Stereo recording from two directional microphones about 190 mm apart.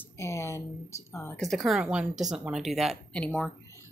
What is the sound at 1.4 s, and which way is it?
A woman's voice, centre (ahead or behind).